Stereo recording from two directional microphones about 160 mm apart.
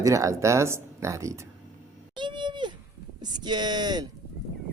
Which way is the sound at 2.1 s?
30° right (ahead or behind).